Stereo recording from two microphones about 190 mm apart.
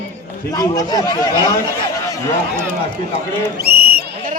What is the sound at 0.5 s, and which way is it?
Speech, 20° left (ahead or behind).